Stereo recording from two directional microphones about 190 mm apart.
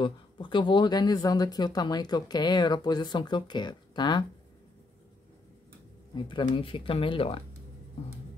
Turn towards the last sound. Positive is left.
turn(degrees=30)  # may be behind; listen again after turning